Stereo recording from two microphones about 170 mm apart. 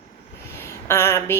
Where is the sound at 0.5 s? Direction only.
15° left (ahead or behind).